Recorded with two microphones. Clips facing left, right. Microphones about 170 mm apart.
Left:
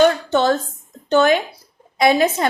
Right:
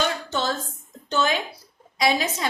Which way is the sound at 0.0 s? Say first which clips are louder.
Left 11 dB; 60° left (ahead or behind).